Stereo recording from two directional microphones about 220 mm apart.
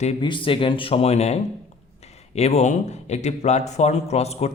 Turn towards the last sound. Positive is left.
turn(degrees=30)  # may be behind; listen again after turning